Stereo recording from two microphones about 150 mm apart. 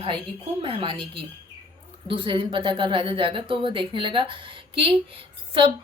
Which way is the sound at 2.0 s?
35° right (ahead or behind).